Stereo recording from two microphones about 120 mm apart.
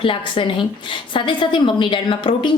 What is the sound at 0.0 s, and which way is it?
A woman's voice, 45° left (ahead or behind).